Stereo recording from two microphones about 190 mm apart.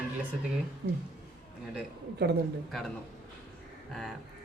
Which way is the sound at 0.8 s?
55° right (ahead or behind).